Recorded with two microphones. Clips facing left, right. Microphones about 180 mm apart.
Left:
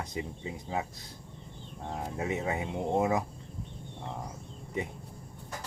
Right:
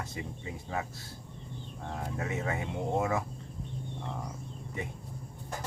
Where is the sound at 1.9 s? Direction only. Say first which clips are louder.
Left 2 dB; 20° left (ahead or behind).